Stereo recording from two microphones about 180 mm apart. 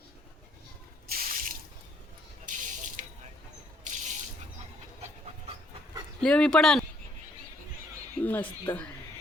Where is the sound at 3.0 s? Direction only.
45° right (ahead or behind).